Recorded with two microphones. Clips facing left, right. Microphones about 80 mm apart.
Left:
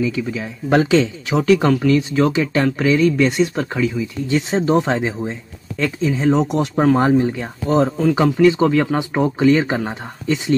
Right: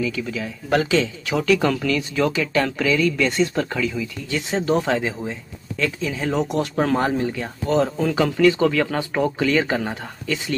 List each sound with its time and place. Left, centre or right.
0.0 s speech: left